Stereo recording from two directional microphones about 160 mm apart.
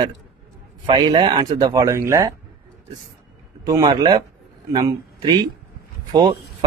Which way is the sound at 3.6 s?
25° right (ahead or behind).